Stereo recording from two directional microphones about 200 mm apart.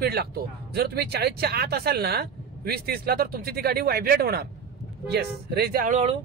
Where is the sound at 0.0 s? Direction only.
50° right (ahead or behind).